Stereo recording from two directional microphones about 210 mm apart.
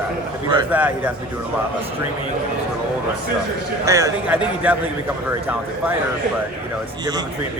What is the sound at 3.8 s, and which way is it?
Speech, 15° right (ahead or behind).